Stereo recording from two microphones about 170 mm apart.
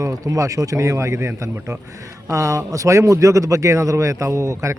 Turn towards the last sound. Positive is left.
turn(degrees=-15)  # may be behind; listen again after turning